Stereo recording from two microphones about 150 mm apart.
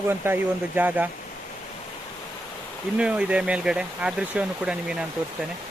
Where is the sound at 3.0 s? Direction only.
5° right (ahead or behind).